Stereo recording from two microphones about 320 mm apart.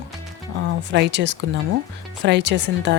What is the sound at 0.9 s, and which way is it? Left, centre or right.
Speech, right.